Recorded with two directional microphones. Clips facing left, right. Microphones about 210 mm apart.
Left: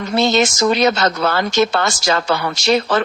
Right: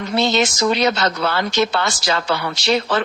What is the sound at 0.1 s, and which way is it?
Speech, 45° left (ahead or behind).